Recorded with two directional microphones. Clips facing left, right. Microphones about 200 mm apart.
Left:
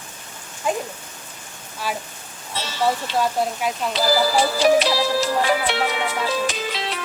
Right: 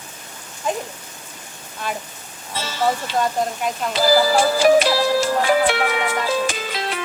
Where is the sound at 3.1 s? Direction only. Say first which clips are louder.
Even; 5° left (ahead or behind).